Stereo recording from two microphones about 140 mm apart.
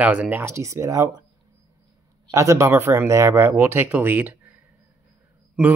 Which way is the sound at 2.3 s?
20° right (ahead or behind).